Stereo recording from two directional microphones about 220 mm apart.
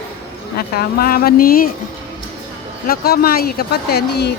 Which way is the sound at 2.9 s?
45° left (ahead or behind).